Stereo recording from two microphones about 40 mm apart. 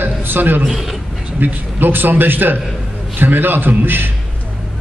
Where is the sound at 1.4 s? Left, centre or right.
Right.